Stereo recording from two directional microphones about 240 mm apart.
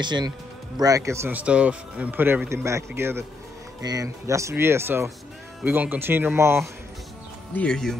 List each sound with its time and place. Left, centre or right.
0.0 s speech: centre
7.5 s speech: centre